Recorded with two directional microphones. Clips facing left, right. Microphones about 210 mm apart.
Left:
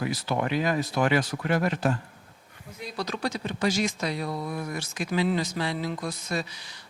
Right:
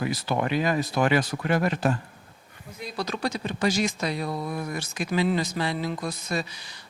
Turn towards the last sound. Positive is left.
turn(degrees=-10)  # may be behind; listen again after turning